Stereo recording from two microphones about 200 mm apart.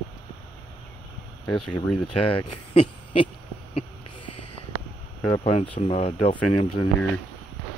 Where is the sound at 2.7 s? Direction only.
25° left (ahead or behind).